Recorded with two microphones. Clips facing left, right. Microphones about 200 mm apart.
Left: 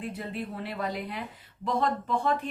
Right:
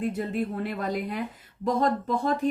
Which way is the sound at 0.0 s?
45° right (ahead or behind).